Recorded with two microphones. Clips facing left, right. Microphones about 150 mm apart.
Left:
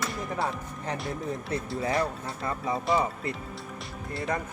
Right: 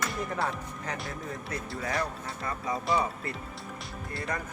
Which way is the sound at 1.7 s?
25° left (ahead or behind).